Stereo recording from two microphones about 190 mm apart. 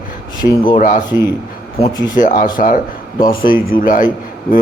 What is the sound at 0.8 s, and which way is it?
Speech, 45° left (ahead or behind).